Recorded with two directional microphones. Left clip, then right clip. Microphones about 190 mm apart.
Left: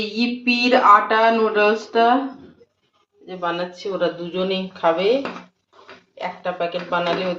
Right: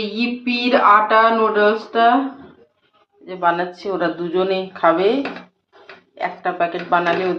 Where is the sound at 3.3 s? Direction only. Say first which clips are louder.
Right 6 dB; 25° right (ahead or behind).